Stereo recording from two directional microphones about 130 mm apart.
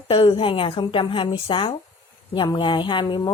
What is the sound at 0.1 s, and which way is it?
A woman's voice, 45° left (ahead or behind).